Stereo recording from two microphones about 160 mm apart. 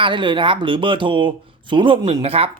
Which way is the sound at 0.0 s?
30° right (ahead or behind).